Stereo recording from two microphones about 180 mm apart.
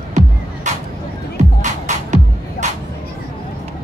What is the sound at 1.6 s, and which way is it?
Music, 40° right (ahead or behind).